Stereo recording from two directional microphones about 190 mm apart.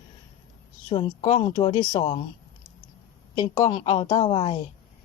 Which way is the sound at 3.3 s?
20° left (ahead or behind).